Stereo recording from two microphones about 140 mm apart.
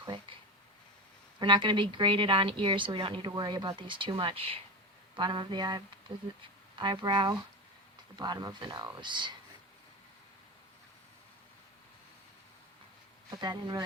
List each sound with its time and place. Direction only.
0.0 s a sound: 35° right (ahead or behind)
1.4 s speech: 35° right (ahead or behind)
13.3 s speech: 30° right (ahead or behind)